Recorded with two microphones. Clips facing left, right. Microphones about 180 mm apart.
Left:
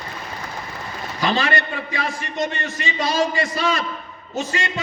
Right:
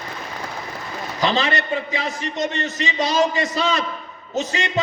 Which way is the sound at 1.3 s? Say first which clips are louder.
Right 1 dB; 20° right (ahead or behind).